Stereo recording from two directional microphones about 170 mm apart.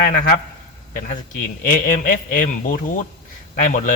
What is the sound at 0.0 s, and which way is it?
Speech, 55° left (ahead or behind).